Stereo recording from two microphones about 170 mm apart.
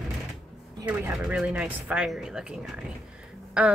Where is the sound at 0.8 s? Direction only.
10° right (ahead or behind).